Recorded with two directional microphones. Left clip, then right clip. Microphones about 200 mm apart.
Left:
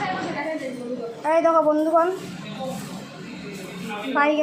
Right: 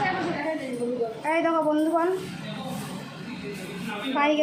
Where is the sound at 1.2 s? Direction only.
10° left (ahead or behind).